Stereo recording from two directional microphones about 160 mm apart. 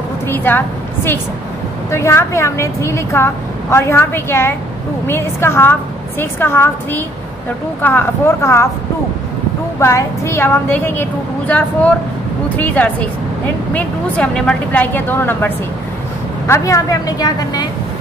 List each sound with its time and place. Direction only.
0.3 s a woman's voice: 10° left (ahead or behind)
9.8 s a woman's voice: 15° left (ahead or behind)